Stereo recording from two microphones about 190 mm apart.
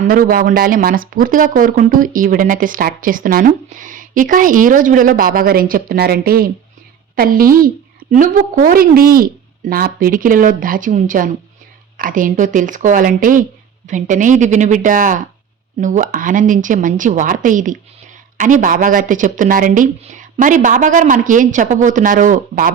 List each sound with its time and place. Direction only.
0.1 s a woman's voice: 50° right (ahead or behind)